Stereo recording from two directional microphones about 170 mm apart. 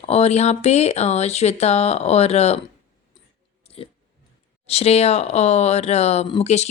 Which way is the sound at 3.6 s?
35° left (ahead or behind).